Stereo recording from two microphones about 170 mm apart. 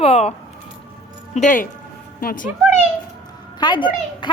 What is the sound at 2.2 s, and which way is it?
Speech, 60° left (ahead or behind).